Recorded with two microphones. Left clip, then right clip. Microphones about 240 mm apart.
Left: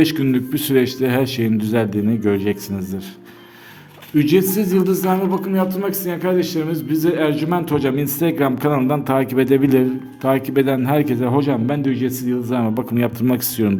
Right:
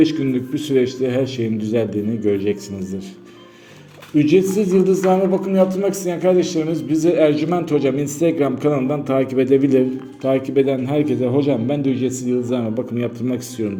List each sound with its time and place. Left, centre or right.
0.0 s speech: left
4.1 s speech: left